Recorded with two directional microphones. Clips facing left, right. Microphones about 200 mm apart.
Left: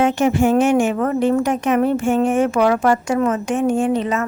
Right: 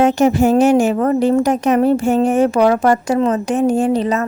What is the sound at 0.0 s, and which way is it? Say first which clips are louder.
Speech: right 3 dB; 40° right (ahead or behind).